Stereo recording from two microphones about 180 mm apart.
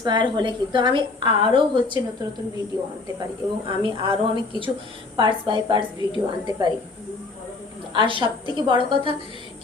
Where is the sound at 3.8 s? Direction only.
30° right (ahead or behind).